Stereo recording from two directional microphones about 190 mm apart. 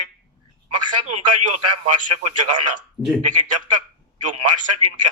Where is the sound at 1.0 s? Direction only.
40° right (ahead or behind).